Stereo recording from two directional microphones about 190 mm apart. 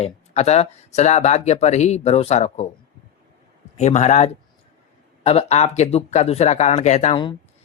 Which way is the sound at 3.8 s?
35° left (ahead or behind).